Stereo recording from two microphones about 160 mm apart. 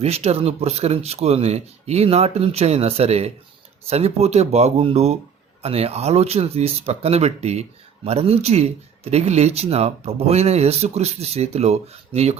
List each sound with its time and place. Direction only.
0.0 s speech: 40° right (ahead or behind)